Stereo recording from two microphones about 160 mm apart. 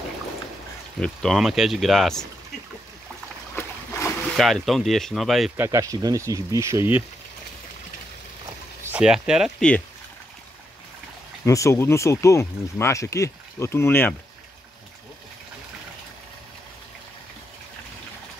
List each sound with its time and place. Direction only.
0.9 s speech: 5° left (ahead or behind)
3.5 s splash: 15° left (ahead or behind)
4.4 s speech: centre (ahead or behind)
5.6 s speech: 20° right (ahead or behind)
8.8 s speech: 5° right (ahead or behind)
9.6 s speech: 5° left (ahead or behind)
11.4 s speech: 20° left (ahead or behind)